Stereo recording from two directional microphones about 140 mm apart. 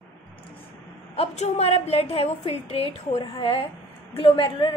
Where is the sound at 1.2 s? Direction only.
50° left (ahead or behind).